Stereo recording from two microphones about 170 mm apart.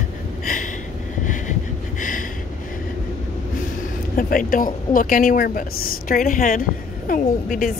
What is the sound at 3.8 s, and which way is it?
A woman's voice, 55° left (ahead or behind).